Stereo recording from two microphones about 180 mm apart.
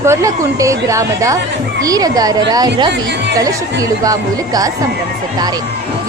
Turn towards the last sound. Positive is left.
turn(degrees=-20)  # may be behind; listen again after turning